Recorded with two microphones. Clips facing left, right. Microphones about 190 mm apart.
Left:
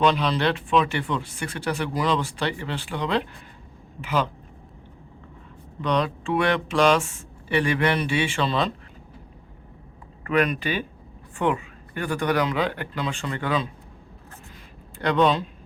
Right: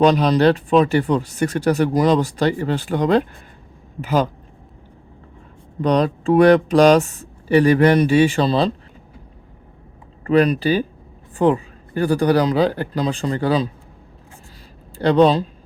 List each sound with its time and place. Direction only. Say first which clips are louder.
0.0 s speech: right 8 dB; 40° right (ahead or behind)
5.8 s speech: right 7 dB; 40° right (ahead or behind)
10.2 s speech: right 7 dB; 35° right (ahead or behind)
14.9 s speech: right 7 dB; 35° right (ahead or behind)